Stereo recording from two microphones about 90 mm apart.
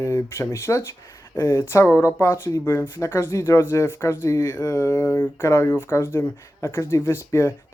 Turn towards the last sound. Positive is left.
turn(degrees=30)  # may be behind; listen again after turning